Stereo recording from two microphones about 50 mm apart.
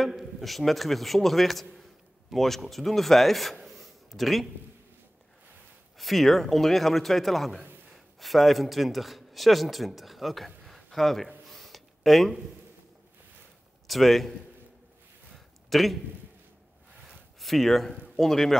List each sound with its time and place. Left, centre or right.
0.0 s a man's voice: centre
5.9 s a man's voice: centre
11.4 s a sound: centre
13.8 s a man's voice: centre
15.3 s a sound: centre
17.4 s a man's voice: centre